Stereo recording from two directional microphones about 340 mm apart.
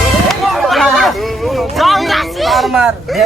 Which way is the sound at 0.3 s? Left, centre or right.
Centre.